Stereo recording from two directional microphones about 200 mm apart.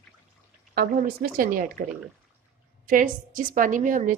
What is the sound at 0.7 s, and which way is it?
A woman's voice, 50° right (ahead or behind).